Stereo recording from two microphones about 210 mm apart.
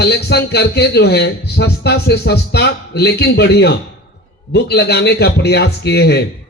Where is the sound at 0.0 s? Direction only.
50° left (ahead or behind).